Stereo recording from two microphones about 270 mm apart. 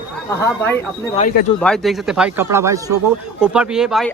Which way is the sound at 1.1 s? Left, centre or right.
Left.